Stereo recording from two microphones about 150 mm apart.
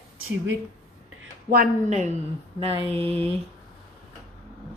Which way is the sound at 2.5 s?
35° right (ahead or behind).